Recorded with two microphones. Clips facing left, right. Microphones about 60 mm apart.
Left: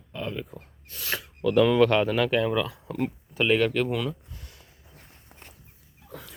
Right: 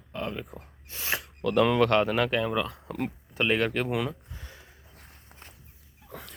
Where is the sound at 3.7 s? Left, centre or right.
Centre.